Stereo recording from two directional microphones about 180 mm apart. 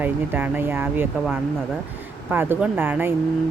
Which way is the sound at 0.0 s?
10° right (ahead or behind).